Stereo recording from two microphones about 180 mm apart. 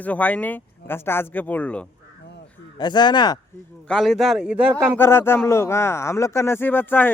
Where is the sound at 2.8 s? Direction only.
25° left (ahead or behind).